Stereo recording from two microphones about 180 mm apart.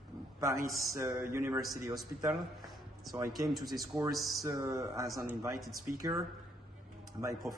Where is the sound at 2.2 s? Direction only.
Centre (ahead or behind).